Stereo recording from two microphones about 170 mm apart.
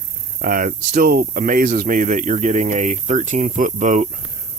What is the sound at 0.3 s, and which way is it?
Speech, 55° right (ahead or behind).